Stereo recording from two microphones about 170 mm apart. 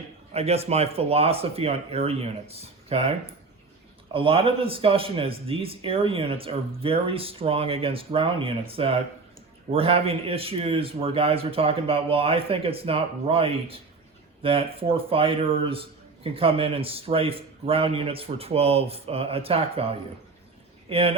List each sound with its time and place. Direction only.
0.3 s a man's voice: 35° right (ahead or behind)
4.1 s a man's voice: 35° right (ahead or behind)